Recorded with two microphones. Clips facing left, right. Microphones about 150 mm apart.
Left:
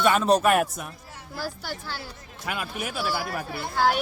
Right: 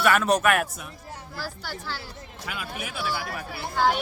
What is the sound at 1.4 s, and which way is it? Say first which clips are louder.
Speech: left 3 dB; 15° left (ahead or behind).